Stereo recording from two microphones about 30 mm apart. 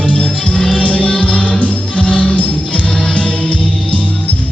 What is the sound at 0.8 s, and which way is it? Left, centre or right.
Music, right.